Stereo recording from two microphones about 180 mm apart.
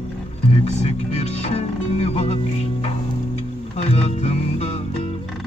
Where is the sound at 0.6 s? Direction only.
35° left (ahead or behind).